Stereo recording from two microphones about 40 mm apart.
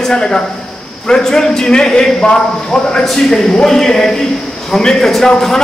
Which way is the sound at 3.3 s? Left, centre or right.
Centre.